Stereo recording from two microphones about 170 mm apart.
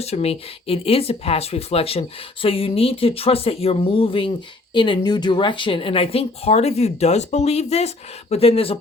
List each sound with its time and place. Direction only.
0.0 s speech: 35° left (ahead or behind)